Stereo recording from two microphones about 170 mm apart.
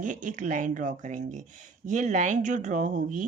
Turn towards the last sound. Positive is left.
turn(degrees=-45)  # may be behind; listen again after turning